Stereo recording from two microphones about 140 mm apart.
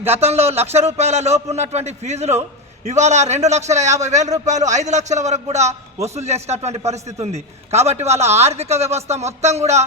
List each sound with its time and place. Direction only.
0.1 s a man's voice: 50° right (ahead or behind)